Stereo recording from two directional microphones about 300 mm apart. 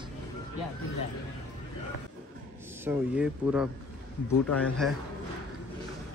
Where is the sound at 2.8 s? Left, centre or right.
Centre.